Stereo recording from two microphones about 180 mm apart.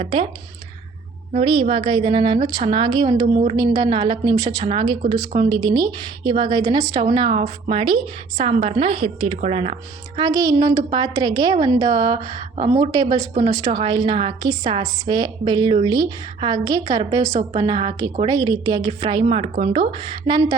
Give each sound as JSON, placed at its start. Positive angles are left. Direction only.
{"t": 0.0, "sound": "a woman's voice", "side_deg": -30}
{"t": 1.3, "sound": "a woman's voice", "side_deg": -35}
{"t": 10.2, "sound": "a woman's voice", "side_deg": -20}
{"t": 19.2, "sound": "a woman's voice", "side_deg": -35}